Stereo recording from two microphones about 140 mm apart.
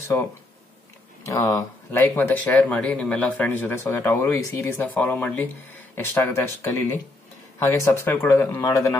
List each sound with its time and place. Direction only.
1.2 s speech: 20° left (ahead or behind)